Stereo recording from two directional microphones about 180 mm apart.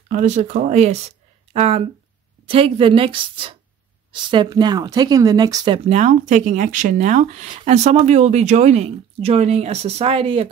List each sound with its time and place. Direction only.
0.1 s speech: 40° right (ahead or behind); by 5.8 s 20° right (ahead or behind)
5.9 s speech: 40° right (ahead or behind)